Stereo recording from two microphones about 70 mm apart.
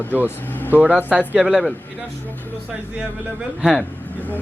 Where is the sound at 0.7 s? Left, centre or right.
Right.